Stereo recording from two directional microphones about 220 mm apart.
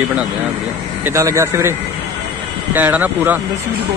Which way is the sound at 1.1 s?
15° right (ahead or behind).